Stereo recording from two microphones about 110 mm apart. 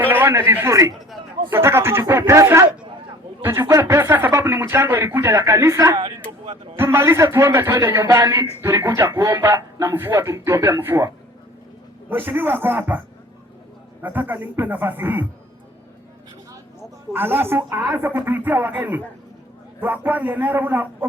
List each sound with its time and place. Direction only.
0.0 s a man's voice: 20° right (ahead or behind)
14.0 s a man's voice: 15° right (ahead or behind)
17.1 s a man's voice: 20° right (ahead or behind)